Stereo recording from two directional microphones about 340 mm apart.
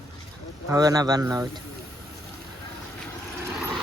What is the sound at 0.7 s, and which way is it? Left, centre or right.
Speech, centre.